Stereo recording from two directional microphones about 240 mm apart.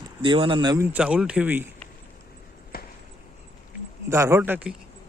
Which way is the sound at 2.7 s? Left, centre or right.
Left.